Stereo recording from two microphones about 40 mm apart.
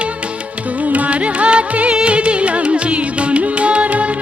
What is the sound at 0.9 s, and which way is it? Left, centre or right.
Music, right.